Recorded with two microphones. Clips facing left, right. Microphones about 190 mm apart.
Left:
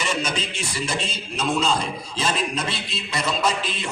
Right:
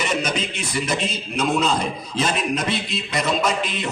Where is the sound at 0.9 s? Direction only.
30° left (ahead or behind).